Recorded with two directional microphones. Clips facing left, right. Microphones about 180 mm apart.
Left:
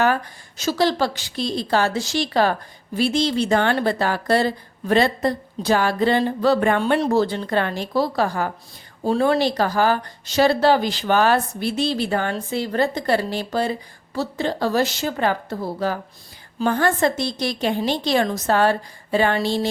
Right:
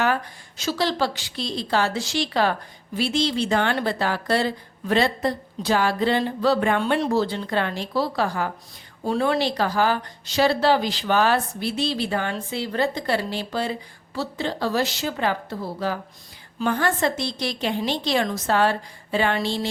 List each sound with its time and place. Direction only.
0.0 s speech: 45° left (ahead or behind)